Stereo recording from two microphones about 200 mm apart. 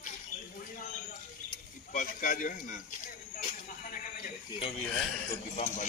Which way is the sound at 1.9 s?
40° left (ahead or behind).